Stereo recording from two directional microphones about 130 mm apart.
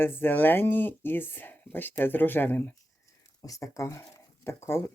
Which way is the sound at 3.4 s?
25° left (ahead or behind).